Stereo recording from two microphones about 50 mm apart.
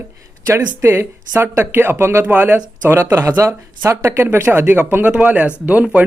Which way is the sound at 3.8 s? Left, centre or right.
Right.